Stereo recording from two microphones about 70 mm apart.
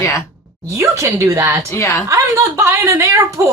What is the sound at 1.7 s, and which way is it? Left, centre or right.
Speech, left.